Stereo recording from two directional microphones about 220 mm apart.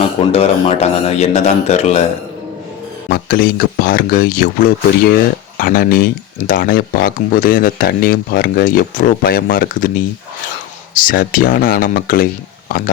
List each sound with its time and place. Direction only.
0.2 s speech: 25° left (ahead or behind)
3.1 s speech: 45° left (ahead or behind)